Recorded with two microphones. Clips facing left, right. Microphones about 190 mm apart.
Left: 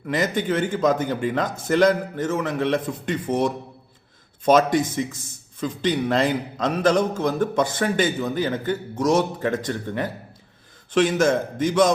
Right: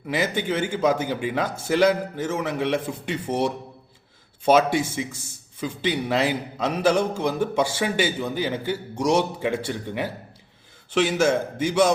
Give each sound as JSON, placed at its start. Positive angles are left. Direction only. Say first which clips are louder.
{"t": 0.1, "sound": "speech", "louder": "left 2 dB", "side_deg": -5}
{"t": 10.9, "sound": "speech", "louder": "left 2 dB", "side_deg": -5}